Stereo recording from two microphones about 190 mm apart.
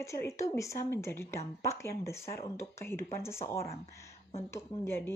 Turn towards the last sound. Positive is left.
turn(degrees=15)  # may be behind; listen again after turning